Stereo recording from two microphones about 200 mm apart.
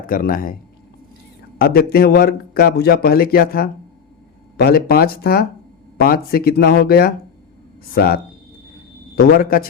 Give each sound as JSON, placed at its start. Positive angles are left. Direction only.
{"t": 0.1, "sound": "a man's voice", "side_deg": 45}
{"t": 1.5, "sound": "a man's voice", "side_deg": 50}